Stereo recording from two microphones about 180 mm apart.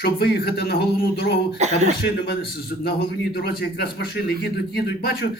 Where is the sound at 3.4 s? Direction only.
60° left (ahead or behind).